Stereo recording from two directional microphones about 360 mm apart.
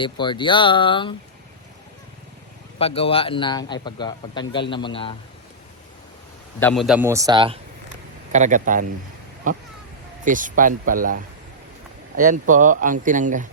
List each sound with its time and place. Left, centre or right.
0.0 s speech: centre
2.7 s speech: centre
6.6 s a man's voice: centre; by 13.5 s right